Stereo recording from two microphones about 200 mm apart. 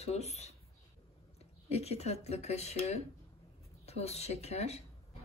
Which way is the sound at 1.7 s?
30° left (ahead or behind).